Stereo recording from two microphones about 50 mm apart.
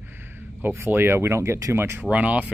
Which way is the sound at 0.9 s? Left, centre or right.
Right.